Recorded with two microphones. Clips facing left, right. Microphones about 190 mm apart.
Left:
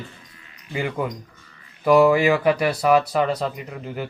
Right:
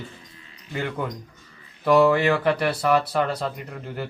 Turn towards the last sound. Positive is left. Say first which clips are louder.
# left 2 dB
turn(degrees=5)  # may be behind; listen again after turning